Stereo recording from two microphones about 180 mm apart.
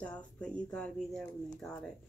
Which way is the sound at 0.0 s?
5° left (ahead or behind).